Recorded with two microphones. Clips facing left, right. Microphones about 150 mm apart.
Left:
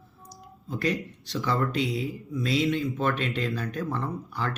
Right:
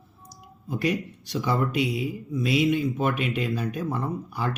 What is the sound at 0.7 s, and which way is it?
Speech, 20° right (ahead or behind).